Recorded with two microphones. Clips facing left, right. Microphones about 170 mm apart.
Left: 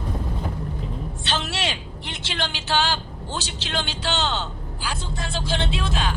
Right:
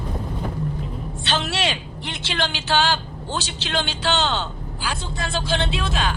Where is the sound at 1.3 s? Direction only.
75° right (ahead or behind).